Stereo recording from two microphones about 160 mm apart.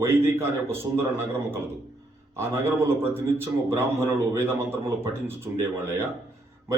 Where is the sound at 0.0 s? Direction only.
15° right (ahead or behind).